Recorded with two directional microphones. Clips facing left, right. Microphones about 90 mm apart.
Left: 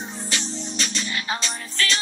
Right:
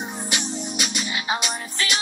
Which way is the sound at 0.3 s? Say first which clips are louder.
Right 1 dB; 15° right (ahead or behind).